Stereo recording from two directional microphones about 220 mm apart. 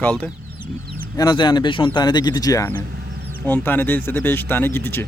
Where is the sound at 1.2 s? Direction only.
20° left (ahead or behind).